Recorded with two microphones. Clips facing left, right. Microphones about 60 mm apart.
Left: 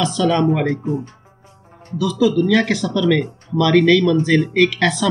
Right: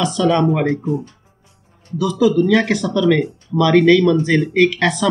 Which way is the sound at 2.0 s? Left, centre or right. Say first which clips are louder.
Right 2 dB; centre.